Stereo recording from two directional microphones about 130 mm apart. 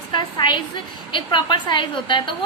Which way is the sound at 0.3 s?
35° left (ahead or behind).